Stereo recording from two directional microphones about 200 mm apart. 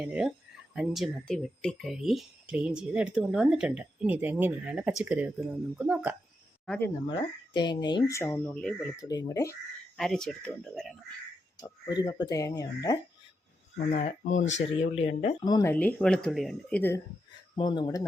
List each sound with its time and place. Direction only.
0.0 s speech: 5° right (ahead or behind)
6.7 s speech: 10° left (ahead or behind)
7.2 s speech: 20° left (ahead or behind)
10.0 s speech: centre (ahead or behind)
11.6 s speech: 20° left (ahead or behind)
13.9 s speech: 35° left (ahead or behind)
15.4 s speech: 20° left (ahead or behind)
15.7 s speech: 5° left (ahead or behind)
17.6 s speech: 25° left (ahead or behind)